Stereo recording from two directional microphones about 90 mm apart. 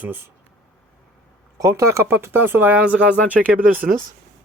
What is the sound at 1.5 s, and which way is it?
Speech, 35° right (ahead or behind).